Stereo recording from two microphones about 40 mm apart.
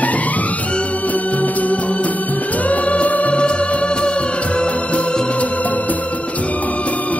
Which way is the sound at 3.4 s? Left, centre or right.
Left.